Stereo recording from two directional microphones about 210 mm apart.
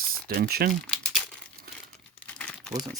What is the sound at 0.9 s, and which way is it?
Crumpling, 5° left (ahead or behind).